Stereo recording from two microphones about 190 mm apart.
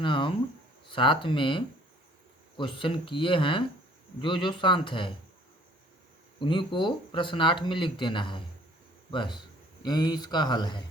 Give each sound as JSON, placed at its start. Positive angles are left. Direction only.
{"t": 0.0, "sound": "speech", "side_deg": 25}
{"t": 6.4, "sound": "speech", "side_deg": 25}
{"t": 9.8, "sound": "speech", "side_deg": 20}